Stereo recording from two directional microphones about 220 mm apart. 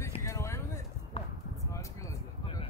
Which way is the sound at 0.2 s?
15° left (ahead or behind).